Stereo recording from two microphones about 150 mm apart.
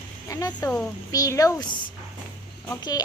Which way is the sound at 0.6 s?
10° left (ahead or behind).